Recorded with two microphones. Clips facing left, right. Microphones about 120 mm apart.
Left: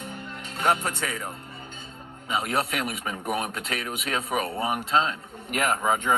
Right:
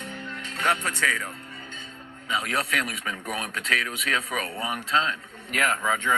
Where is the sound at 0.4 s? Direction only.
30° left (ahead or behind).